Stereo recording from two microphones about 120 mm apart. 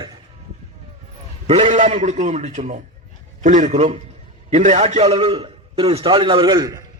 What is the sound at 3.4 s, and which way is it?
A man's voice, 90° right.